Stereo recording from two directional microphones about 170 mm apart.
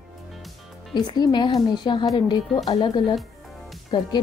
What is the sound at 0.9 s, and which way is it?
A woman's voice, 25° left (ahead or behind).